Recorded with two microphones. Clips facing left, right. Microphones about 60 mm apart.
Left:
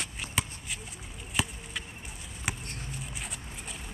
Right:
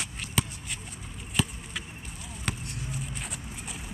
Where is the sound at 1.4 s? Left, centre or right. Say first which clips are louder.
Right 2 dB; centre.